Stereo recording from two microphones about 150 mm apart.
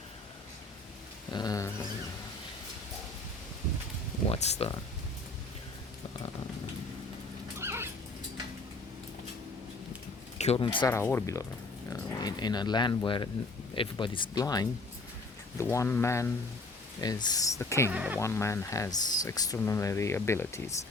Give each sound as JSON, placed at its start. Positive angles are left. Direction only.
{"t": 1.3, "sound": "speech", "side_deg": 25}
{"t": 4.3, "sound": "speech", "side_deg": 45}
{"t": 7.6, "sound": "dog", "side_deg": -15}
{"t": 10.3, "sound": "speech", "side_deg": 45}
{"t": 10.8, "sound": "speech", "side_deg": 20}
{"t": 17.8, "sound": "speech", "side_deg": -10}
{"t": 18.2, "sound": "speech", "side_deg": 20}